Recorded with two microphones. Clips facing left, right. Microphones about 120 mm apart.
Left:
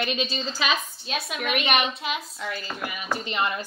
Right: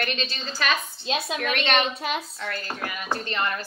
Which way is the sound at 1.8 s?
40° right (ahead or behind).